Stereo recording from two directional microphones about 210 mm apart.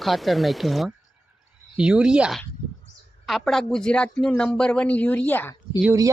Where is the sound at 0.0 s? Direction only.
Centre (ahead or behind).